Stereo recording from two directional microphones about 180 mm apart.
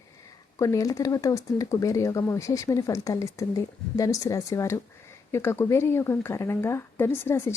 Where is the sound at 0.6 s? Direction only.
20° left (ahead or behind).